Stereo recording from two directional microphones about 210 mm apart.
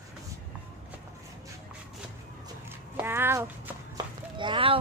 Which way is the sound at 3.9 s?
20° right (ahead or behind).